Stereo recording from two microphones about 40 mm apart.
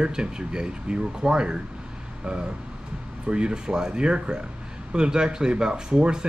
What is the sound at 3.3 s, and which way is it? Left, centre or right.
Speech, right.